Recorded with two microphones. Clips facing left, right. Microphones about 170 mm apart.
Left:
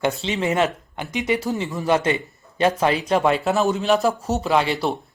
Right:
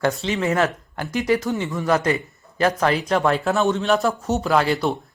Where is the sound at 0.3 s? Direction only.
20° left (ahead or behind).